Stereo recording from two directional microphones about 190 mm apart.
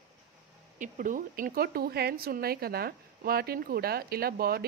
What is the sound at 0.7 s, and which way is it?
Speech, 40° right (ahead or behind).